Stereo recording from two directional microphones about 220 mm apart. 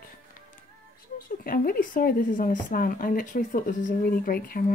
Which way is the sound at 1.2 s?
40° left (ahead or behind).